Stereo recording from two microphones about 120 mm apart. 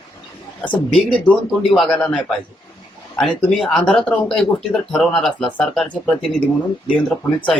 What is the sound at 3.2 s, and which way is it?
Speech, centre (ahead or behind).